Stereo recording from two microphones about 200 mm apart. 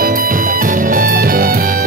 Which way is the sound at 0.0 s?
45° right (ahead or behind).